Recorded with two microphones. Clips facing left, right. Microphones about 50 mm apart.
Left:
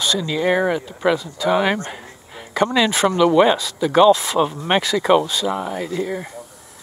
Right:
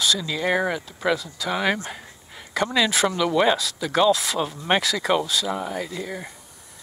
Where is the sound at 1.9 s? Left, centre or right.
Centre.